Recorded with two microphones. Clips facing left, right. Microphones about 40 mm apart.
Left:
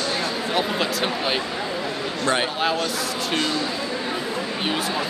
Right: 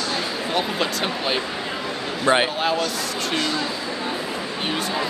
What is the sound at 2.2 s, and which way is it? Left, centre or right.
Speech, centre.